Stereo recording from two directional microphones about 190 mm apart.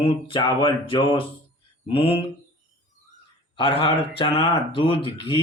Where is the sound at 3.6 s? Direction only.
25° left (ahead or behind).